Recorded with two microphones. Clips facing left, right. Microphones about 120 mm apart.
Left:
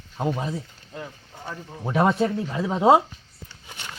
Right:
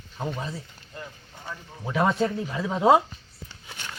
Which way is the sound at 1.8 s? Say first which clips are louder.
Left 3 dB; 30° left (ahead or behind).